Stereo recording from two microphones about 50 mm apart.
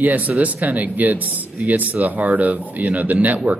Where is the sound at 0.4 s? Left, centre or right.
Right.